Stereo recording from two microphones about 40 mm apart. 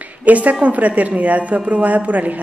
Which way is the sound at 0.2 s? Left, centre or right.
Right.